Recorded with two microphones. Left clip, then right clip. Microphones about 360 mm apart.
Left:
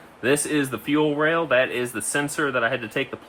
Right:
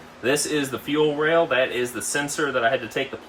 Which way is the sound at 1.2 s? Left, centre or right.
Centre.